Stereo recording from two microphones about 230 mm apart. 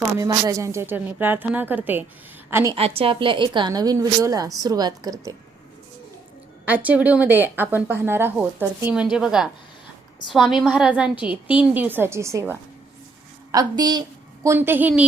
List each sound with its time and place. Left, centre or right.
0.2 s speech: centre
2.7 s a woman's voice: right
6.7 s a woman's voice: centre